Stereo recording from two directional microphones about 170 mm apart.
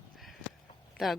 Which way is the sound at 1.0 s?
Centre (ahead or behind).